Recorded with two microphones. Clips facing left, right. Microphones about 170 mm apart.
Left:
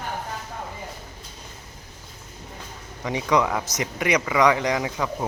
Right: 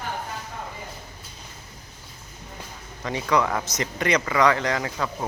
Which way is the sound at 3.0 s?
15° left (ahead or behind).